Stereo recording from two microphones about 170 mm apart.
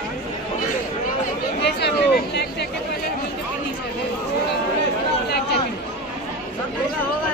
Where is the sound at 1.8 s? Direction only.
80° left.